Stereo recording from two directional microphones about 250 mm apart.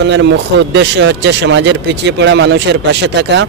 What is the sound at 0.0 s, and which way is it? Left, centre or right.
Speech, right.